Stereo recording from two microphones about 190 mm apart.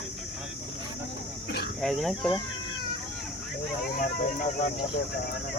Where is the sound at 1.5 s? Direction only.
60° left (ahead or behind).